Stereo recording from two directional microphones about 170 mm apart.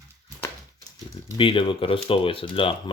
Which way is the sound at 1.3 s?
30° left (ahead or behind).